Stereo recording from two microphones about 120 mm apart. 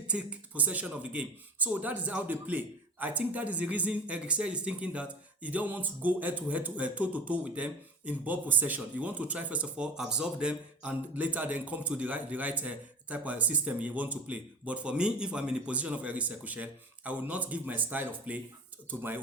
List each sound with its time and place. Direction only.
0.1 s speech: 10° right (ahead or behind)